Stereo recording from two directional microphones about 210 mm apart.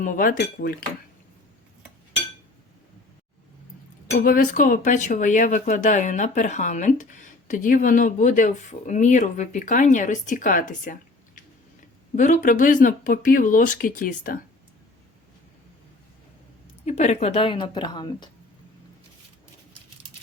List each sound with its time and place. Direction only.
0.0 s speech: 40° left (ahead or behind)
4.1 s speech: 45° left (ahead or behind)
12.1 s speech: 35° left (ahead or behind)
16.8 s a woman's voice: 30° left (ahead or behind)